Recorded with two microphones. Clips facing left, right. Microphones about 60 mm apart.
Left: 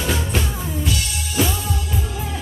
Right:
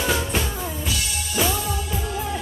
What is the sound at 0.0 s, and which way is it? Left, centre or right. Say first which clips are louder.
Music: even; centre.